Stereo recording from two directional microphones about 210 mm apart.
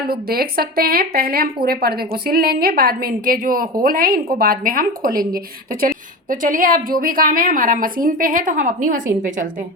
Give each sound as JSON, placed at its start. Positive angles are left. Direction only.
{"t": 0.1, "sound": "a woman's voice", "side_deg": -45}
{"t": 6.4, "sound": "a woman's voice", "side_deg": -40}